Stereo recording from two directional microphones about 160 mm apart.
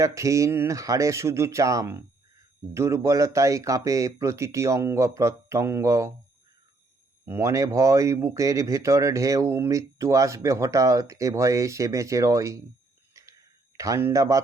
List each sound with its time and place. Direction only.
0.0 s speech: 20° right (ahead or behind)
7.3 s speech: 15° right (ahead or behind)
13.7 s speech: 20° right (ahead or behind)